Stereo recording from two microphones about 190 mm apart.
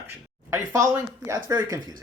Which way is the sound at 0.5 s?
15° right (ahead or behind).